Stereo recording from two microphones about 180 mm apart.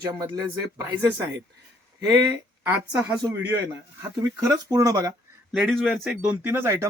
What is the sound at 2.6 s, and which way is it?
Speech, 10° right (ahead or behind).